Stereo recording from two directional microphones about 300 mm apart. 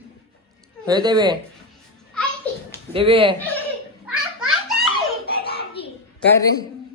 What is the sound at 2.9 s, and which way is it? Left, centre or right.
Speech, centre.